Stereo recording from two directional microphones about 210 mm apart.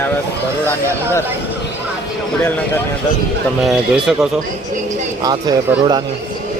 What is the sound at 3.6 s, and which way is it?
Speech, 5° right (ahead or behind).